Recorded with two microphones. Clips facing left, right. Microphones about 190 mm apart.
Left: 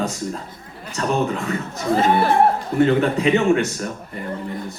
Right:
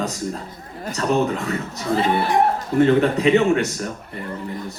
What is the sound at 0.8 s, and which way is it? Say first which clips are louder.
Speech: right 2 dB; 35° right (ahead or behind).